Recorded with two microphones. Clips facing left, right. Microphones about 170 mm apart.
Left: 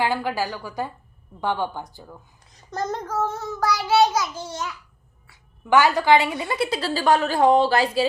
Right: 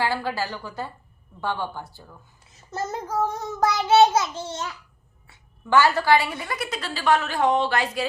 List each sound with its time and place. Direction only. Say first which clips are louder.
0.0 s a woman's voice: left 2 dB; 15° left (ahead or behind)
2.4 s child singing: left 2 dB; 5° right (ahead or behind); by 4.7 s 25° right (ahead or behind)
5.6 s a woman's voice: left 2 dB; 15° left (ahead or behind); by 8.0 s 35° left (ahead or behind)